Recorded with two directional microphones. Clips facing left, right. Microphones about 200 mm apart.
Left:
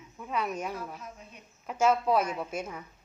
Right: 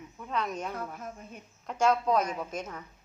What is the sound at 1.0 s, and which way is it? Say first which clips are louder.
Speech: right 4 dB; 50° right (ahead or behind).